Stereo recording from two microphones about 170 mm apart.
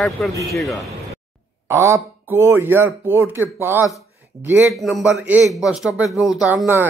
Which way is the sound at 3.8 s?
20° left (ahead or behind).